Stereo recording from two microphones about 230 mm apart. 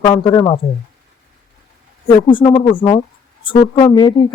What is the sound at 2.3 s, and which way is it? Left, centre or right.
Speech, left.